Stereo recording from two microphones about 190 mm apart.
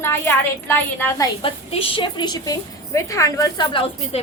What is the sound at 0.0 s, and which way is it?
A woman's voice, 10° left (ahead or behind).